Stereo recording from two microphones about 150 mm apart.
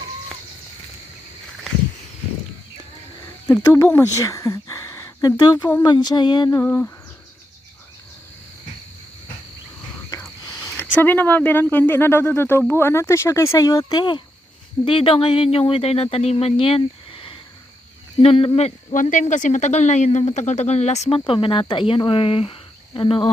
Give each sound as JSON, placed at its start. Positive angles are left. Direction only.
{"t": 3.4, "sound": "speech", "side_deg": 20}
{"t": 6.5, "sound": "speech", "side_deg": 15}
{"t": 10.1, "sound": "a sound", "side_deg": 20}
{"t": 10.8, "sound": "speech", "side_deg": 15}